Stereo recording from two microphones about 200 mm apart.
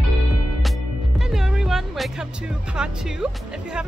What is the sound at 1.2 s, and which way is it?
Speech, centre (ahead or behind).